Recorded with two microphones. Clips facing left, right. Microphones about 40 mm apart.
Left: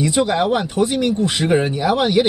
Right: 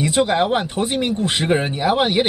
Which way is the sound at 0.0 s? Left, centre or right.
Right.